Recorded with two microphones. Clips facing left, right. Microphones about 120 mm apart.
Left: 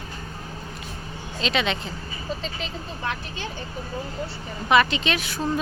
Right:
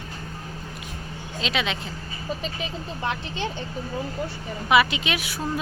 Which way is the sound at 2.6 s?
20° right (ahead or behind).